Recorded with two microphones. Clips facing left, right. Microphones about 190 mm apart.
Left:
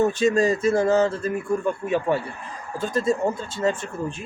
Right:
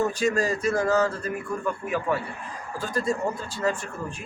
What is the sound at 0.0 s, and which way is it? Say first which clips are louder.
Speech: left 5 dB; 25° left (ahead or behind).